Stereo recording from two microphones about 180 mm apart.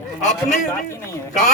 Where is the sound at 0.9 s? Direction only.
15° left (ahead or behind).